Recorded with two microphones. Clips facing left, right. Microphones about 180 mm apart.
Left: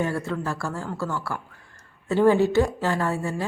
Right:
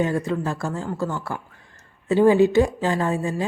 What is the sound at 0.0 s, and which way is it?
A woman's voice, 20° right (ahead or behind).